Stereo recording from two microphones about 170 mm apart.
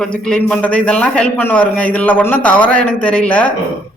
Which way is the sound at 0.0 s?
5° left (ahead or behind).